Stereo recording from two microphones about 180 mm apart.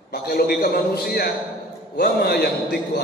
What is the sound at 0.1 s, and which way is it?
A man's voice, 55° left (ahead or behind).